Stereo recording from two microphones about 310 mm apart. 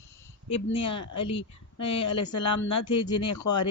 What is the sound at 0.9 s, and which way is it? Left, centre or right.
Speech, left.